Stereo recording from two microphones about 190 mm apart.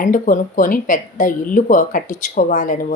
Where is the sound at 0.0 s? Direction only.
45° left (ahead or behind).